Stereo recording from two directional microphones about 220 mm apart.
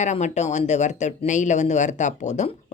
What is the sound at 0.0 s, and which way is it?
Speech, 30° left (ahead or behind).